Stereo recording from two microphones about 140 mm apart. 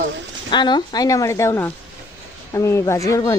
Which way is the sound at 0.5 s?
30° left (ahead or behind).